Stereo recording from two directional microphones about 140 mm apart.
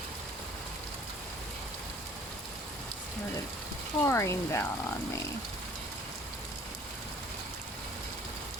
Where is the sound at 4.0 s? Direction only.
20° left (ahead or behind).